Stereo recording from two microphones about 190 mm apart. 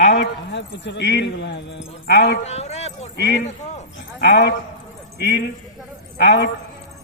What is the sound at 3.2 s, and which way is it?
Speech, 60° left (ahead or behind).